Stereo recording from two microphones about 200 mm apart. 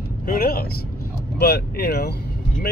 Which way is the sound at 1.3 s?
55° left (ahead or behind).